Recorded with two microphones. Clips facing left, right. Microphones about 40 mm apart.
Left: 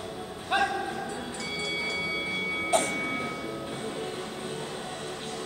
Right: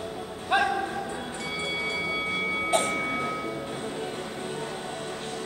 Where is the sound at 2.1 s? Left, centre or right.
Centre.